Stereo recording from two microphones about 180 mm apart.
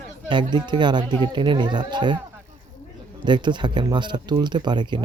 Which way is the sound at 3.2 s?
25° right (ahead or behind).